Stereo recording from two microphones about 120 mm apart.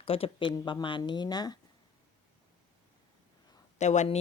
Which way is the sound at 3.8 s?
75° left (ahead or behind).